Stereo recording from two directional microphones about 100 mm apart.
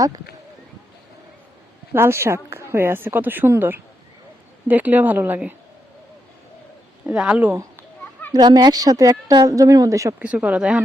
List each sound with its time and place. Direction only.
1.9 s speech: 25° right (ahead or behind)
7.1 s speech: 10° right (ahead or behind)
8.3 s a woman's voice: 40° right (ahead or behind)
10.2 s speech: 15° right (ahead or behind)